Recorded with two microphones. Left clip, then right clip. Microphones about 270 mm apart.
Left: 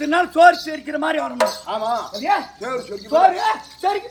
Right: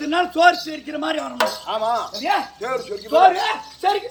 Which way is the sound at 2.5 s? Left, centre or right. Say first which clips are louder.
Right 1 dB; centre.